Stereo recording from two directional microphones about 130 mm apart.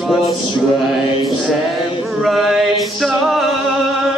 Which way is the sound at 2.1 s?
Centre (ahead or behind).